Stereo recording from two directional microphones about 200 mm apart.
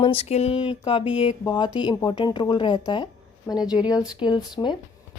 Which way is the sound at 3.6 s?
5° right (ahead or behind).